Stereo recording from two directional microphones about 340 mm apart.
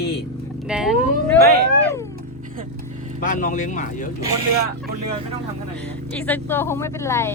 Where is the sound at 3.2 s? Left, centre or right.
Left.